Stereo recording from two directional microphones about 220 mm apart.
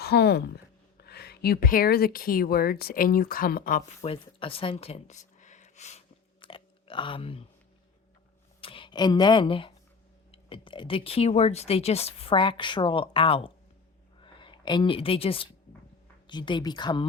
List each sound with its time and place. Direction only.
0.0 s speech: 50° left (ahead or behind); by 6.0 s 30° left (ahead or behind)
6.4 s chewing: 25° left (ahead or behind)
8.6 s speech: 25° left (ahead or behind)
14.2 s a sound: 20° left (ahead or behind)
16.2 s speech: 20° left (ahead or behind)